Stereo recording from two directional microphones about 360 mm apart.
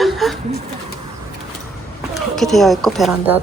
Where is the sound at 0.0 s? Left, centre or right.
Centre.